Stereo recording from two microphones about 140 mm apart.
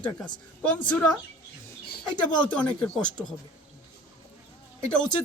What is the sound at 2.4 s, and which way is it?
Speech, 10° left (ahead or behind).